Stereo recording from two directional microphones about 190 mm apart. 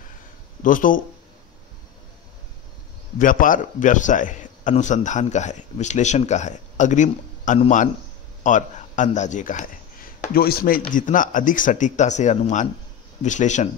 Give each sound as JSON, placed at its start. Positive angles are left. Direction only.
{"t": 0.6, "sound": "speech", "side_deg": 45}
{"t": 3.2, "sound": "a man's voice", "side_deg": 45}
{"t": 10.2, "sound": "a man's voice", "side_deg": 50}